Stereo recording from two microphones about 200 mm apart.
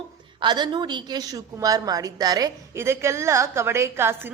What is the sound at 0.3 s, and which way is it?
A woman's voice, 20° right (ahead or behind).